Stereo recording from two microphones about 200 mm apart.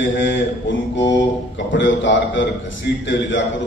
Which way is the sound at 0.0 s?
65° left (ahead or behind).